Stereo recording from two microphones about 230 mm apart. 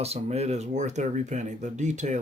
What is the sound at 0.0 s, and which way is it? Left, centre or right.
Speech, right.